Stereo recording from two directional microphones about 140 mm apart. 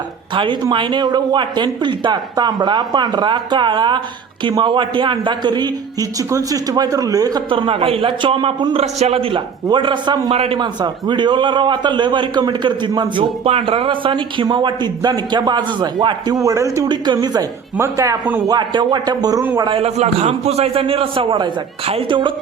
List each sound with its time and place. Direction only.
0.3 s a man's voice: 35° right (ahead or behind)
8.8 s a man's voice: 50° right (ahead or behind); by 10.3 s 30° right (ahead or behind)
10.3 s a man's voice: 45° right (ahead or behind)
10.6 s a man's voice: 30° right (ahead or behind)
19.8 s a man's voice: 50° right (ahead or behind)